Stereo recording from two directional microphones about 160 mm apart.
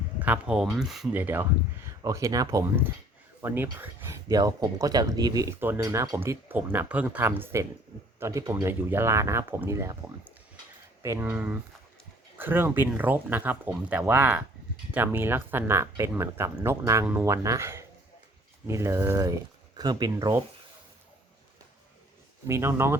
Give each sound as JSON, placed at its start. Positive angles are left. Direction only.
{"t": 0.2, "sound": "speech", "side_deg": -10}
{"t": 4.3, "sound": "speech", "side_deg": -25}
{"t": 11.0, "sound": "speech", "side_deg": -15}
{"t": 22.4, "sound": "speech", "side_deg": -15}